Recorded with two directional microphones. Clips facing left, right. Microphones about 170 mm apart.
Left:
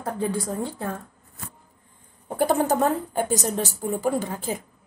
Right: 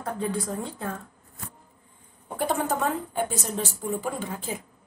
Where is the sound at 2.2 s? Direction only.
40° left (ahead or behind).